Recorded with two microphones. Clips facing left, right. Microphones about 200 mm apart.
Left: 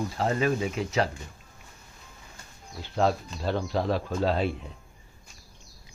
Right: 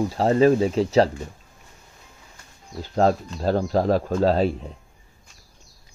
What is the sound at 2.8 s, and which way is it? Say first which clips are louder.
Speech: right 5 dB; 40° right (ahead or behind).